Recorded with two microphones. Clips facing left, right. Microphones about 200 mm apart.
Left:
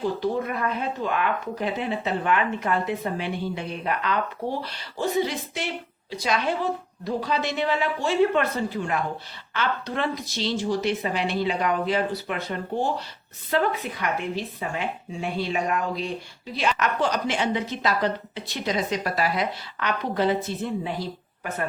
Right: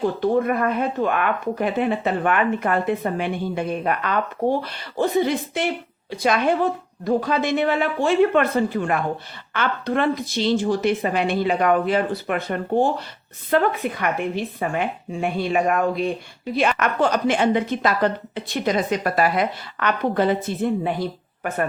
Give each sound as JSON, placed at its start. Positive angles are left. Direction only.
{"t": 0.0, "sound": "speech", "side_deg": -55}